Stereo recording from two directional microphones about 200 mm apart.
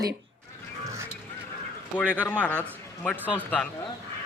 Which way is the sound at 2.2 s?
5° left (ahead or behind).